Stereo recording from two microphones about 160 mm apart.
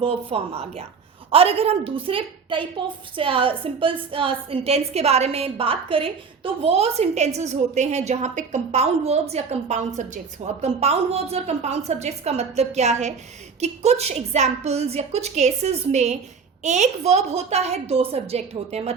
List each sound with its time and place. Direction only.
0.0 s a woman's voice: 35° right (ahead or behind)